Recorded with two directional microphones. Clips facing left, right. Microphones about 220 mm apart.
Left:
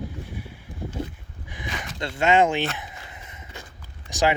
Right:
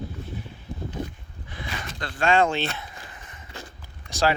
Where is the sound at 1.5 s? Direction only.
15° left (ahead or behind).